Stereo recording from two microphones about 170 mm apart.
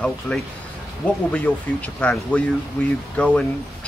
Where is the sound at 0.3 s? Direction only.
5° left (ahead or behind).